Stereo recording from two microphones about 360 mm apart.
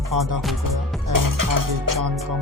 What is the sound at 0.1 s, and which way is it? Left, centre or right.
Music, right.